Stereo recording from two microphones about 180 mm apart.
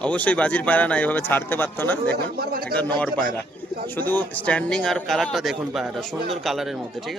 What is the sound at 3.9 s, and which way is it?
Speech, 10° left (ahead or behind).